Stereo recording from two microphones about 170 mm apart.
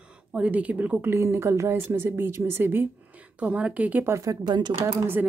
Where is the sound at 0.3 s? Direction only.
5° right (ahead or behind); by 4.8 s 25° right (ahead or behind).